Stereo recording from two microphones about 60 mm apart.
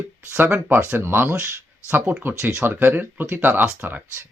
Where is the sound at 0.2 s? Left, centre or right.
Right.